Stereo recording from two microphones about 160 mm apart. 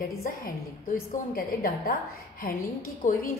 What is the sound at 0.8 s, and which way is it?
A woman's voice, 60° left (ahead or behind).